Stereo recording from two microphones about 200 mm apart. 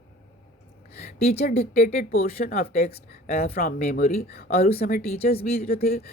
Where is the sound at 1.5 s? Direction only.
35° left (ahead or behind).